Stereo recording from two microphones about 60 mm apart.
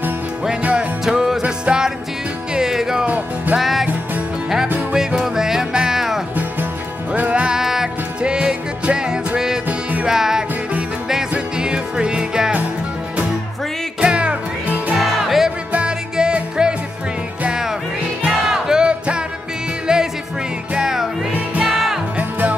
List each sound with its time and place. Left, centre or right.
0.6 s music: right
1.0 s music: centre
3.1 s music: right
3.5 s music: centre
4.9 s music: centre
7.1 s music: right
7.5 s music: centre
9.7 s music: right
10.0 s music: centre
14.0 s music: centre
15.0 s music: centre
15.7 s music: centre
22.1 s music: right